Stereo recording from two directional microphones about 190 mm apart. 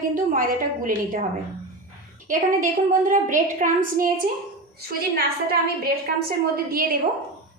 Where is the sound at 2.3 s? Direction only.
45° right (ahead or behind).